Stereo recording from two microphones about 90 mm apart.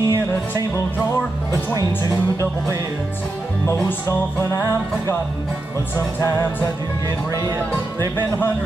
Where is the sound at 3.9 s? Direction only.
35° left (ahead or behind).